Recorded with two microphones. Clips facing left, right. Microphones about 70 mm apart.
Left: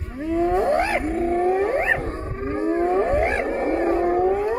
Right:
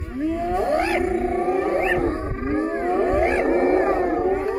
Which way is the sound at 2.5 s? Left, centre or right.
Centre.